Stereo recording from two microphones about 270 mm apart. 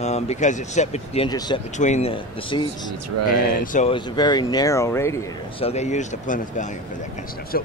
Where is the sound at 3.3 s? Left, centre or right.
Left; by 5.2 s centre.